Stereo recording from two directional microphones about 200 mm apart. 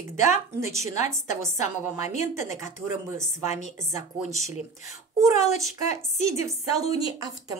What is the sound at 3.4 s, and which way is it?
Speech, 35° left (ahead or behind).